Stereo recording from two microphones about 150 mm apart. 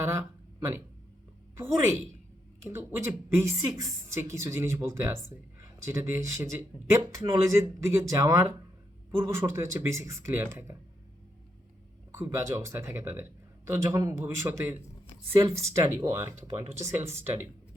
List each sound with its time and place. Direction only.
0.0 s speech: 20° right (ahead or behind)
12.1 s speech: 15° right (ahead or behind)